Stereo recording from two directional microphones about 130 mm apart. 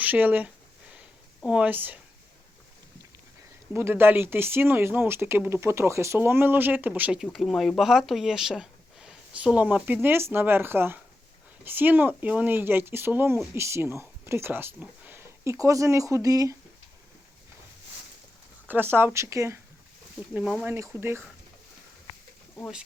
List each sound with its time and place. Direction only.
0.0 s speech: 15° right (ahead or behind)
3.7 s speech: 15° right (ahead or behind)
18.7 s speech: 15° right (ahead or behind)
20.3 s speech: 5° right (ahead or behind)
20.7 s speech: 20° right (ahead or behind)